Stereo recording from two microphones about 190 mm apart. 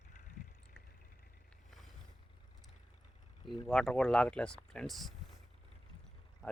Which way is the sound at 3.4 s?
Centre (ahead or behind).